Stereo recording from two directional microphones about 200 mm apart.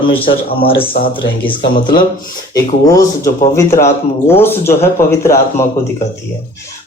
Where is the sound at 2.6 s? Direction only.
15° left (ahead or behind).